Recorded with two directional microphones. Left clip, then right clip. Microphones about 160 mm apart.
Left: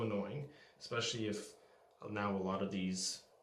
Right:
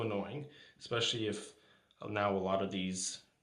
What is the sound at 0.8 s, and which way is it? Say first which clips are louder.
Speech: right 5 dB; 50° right (ahead or behind).